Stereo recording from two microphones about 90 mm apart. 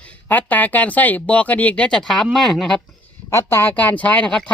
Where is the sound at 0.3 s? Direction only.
20° left (ahead or behind); by 2.7 s centre (ahead or behind).